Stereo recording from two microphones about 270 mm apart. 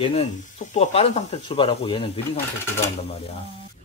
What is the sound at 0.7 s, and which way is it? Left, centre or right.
Speech, left.